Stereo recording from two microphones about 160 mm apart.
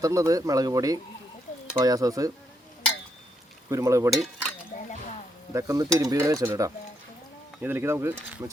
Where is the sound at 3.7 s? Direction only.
20° right (ahead or behind).